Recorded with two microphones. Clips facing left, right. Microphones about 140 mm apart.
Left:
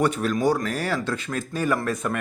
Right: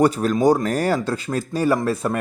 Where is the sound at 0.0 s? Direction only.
40° right (ahead or behind).